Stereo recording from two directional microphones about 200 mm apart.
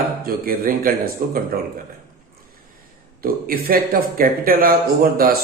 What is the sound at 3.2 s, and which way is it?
Speech, 45° right (ahead or behind).